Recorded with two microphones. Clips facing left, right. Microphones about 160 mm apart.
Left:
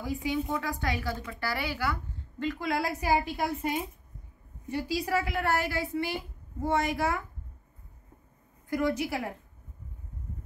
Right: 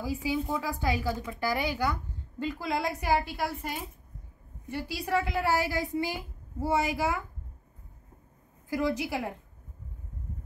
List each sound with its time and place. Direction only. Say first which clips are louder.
0.0 s speech: even; 10° right (ahead or behind)
2.6 s a woman's voice: even; centre (ahead or behind)
3.0 s a woman's voice: left 1 dB; 10° left (ahead or behind)
4.6 s a woman's voice: left 2 dB; 10° left (ahead or behind)
5.6 s speech: right 1 dB; 15° right (ahead or behind)
8.6 s a woman's voice: left 1 dB; centre (ahead or behind)